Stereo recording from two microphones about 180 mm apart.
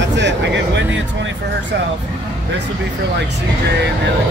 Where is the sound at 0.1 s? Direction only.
80° right.